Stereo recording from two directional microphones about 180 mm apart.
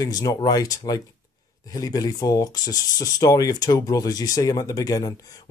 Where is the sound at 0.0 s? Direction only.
20° left (ahead or behind).